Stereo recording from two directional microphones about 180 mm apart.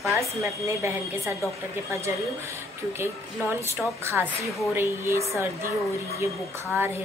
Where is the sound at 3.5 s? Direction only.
15° right (ahead or behind).